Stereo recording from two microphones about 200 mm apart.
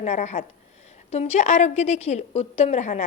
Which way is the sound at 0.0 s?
35° left (ahead or behind).